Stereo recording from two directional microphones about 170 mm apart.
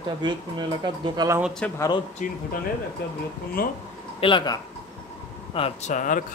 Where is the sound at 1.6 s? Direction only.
5° left (ahead or behind).